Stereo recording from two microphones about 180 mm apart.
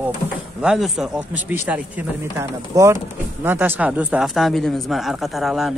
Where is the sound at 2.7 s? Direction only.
20° right (ahead or behind); by 5.7 s centre (ahead or behind).